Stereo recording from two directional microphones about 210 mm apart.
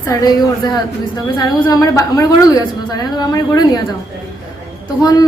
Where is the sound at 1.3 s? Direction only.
15° left (ahead or behind).